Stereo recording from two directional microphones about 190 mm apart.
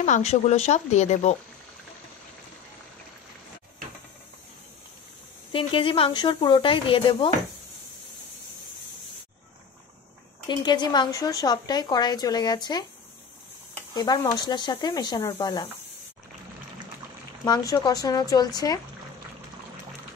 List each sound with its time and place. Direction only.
0.0 s speech: 35° left (ahead or behind)
5.5 s a woman's voice: 30° left (ahead or behind)
10.5 s a woman's voice: 20° left (ahead or behind)
13.9 s a woman's voice: 20° left (ahead or behind)
17.5 s a woman's voice: 20° left (ahead or behind)